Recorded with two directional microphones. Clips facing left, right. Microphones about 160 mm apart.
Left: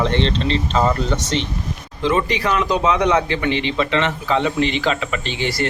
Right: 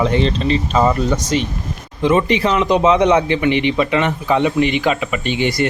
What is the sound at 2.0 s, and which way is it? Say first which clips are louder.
Speech: right 4 dB; 20° right (ahead or behind).